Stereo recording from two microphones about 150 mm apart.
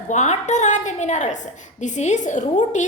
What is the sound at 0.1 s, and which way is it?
A woman's voice, 50° left (ahead or behind).